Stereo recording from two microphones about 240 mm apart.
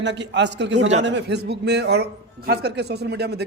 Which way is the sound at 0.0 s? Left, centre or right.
Right.